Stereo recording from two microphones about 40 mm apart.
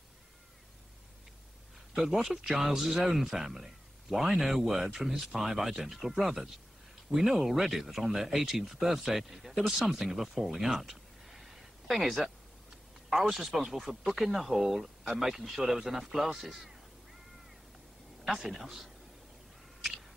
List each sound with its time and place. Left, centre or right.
2.0 s speech: centre
18.2 s speech: centre